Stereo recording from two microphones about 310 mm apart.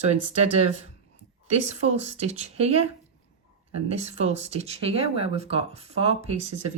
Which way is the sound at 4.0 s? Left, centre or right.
Right.